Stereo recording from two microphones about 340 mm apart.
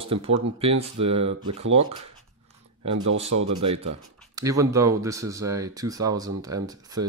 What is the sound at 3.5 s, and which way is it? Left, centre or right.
Speech, right.